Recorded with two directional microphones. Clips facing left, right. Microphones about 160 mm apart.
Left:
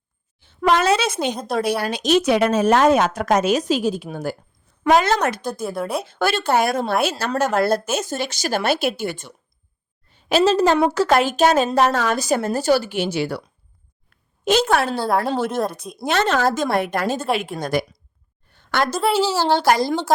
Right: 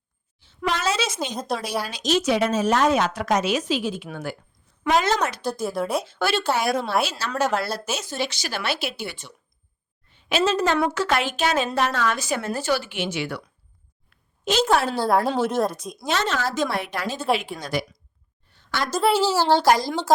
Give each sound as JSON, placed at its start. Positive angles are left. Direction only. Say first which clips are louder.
{"t": 0.3, "sound": "a sound", "louder": "left 8 dB", "side_deg": 55}
{"t": 1.5, "sound": "speech", "louder": "left 9 dB", "side_deg": 60}
{"t": 4.8, "sound": "speech", "louder": "left 4 dB", "side_deg": 55}
{"t": 5.6, "sound": "a woman's voice", "louder": "even", "side_deg": 0}
{"t": 6.0, "sound": "a woman's voice", "louder": "left 3 dB", "side_deg": 55}
{"t": 14.5, "sound": "speech", "louder": "left 5 dB", "side_deg": 50}
{"t": 14.8, "sound": "a woman's voice", "louder": "even", "side_deg": -5}
{"t": 16.0, "sound": "speech", "louder": "left 6 dB", "side_deg": 55}
{"t": 18.5, "sound": "a sound", "louder": "left 6 dB", "side_deg": 55}
{"t": 18.9, "sound": "a woman's voice", "louder": "right 2 dB", "side_deg": 0}
{"t": 19.5, "sound": "a woman's voice", "louder": "left 2 dB", "side_deg": 60}